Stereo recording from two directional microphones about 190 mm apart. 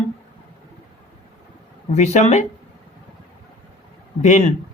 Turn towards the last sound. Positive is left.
turn(degrees=40)  # may be behind; listen again after turning